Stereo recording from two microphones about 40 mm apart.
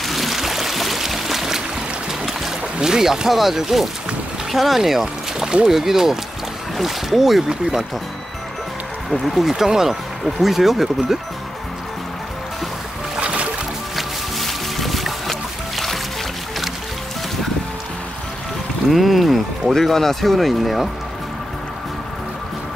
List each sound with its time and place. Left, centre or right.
0.0 s a sound: centre
2.8 s speech: centre
9.2 s speech: centre
9.5 s speech: centre
13.2 s music: right
13.9 s music: centre
18.9 s speech: centre